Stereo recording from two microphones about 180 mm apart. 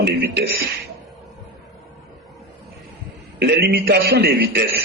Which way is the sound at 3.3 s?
65° right (ahead or behind).